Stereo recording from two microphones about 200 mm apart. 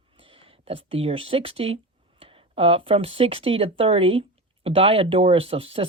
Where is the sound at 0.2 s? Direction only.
25° right (ahead or behind).